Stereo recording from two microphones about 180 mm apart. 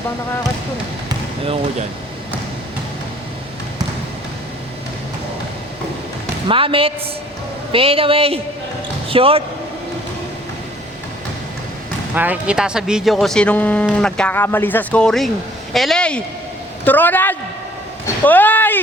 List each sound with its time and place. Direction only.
6.5 s speech: 30° right (ahead or behind)
12.1 s speech: 10° right (ahead or behind); by 17.3 s 10° left (ahead or behind)
18.0 s a sound: 10° left (ahead or behind)